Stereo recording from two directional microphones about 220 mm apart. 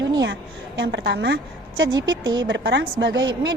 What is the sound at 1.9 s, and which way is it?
Speech, 20° right (ahead or behind).